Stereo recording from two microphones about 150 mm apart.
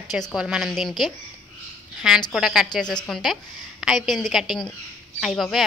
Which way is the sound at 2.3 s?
5° right (ahead or behind).